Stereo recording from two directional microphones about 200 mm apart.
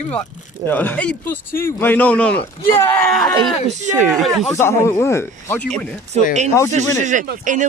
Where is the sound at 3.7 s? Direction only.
35° right (ahead or behind).